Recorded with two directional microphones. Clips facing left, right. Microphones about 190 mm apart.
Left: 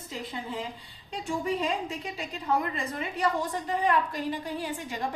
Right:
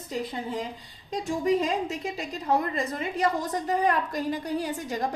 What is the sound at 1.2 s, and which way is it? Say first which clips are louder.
A woman's voice: right 4 dB; 40° right (ahead or behind).